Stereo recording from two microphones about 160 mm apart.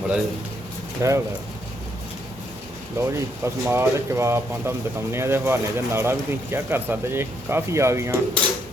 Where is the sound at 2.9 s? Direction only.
15° right (ahead or behind).